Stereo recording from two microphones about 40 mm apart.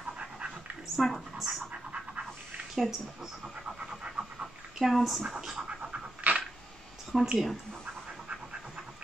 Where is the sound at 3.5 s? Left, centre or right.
Right.